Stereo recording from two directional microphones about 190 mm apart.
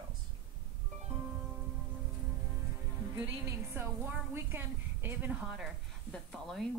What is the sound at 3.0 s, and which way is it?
A woman's voice, 10° right (ahead or behind).